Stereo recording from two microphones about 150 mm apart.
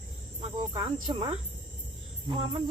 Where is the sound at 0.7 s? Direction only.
30° right (ahead or behind).